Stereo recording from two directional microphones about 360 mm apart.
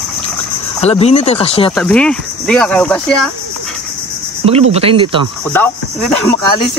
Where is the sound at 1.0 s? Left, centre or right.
Centre.